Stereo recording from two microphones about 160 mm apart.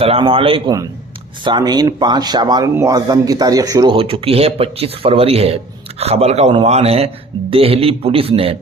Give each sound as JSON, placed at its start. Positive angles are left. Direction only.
{"t": 0.0, "sound": "speech", "side_deg": -35}
{"t": 3.9, "sound": "speech", "side_deg": -35}